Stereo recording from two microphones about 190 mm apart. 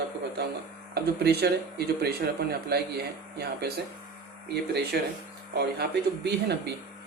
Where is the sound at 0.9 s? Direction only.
60° right (ahead or behind).